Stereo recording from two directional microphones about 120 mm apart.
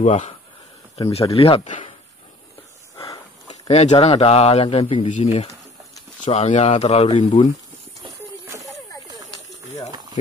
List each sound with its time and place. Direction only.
0.0 s speech: 80° left
1.3 s speech: 55° left (ahead or behind)
3.6 s speech: 65° left (ahead or behind)
4.0 s speech: 55° left (ahead or behind)
5.0 s speech: 75° left (ahead or behind)
7.2 s speech: 50° left (ahead or behind)